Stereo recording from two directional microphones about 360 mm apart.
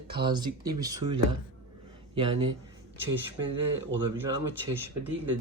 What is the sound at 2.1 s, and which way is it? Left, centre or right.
Speech, centre.